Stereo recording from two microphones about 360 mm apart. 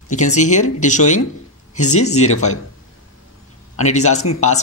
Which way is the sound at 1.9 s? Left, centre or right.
Left.